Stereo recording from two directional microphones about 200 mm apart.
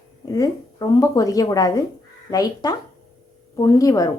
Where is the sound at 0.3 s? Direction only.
20° left (ahead or behind).